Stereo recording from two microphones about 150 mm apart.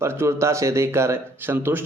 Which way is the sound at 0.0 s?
15° right (ahead or behind).